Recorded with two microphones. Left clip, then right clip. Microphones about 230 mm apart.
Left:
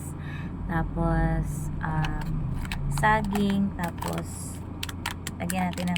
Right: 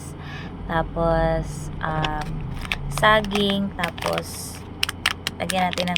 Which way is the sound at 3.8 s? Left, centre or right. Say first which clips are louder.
Right 8 dB; right.